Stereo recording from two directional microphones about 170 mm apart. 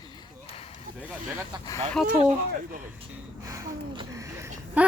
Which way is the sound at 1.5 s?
25° right (ahead or behind).